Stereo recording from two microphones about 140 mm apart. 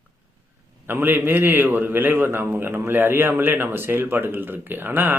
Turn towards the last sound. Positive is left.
turn(degrees=-15)  # may be behind; listen again after turning